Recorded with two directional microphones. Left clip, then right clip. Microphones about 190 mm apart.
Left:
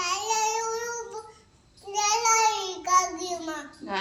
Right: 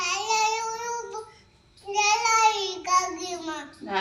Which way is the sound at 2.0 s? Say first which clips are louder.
Right 2 dB; 25° left (ahead or behind).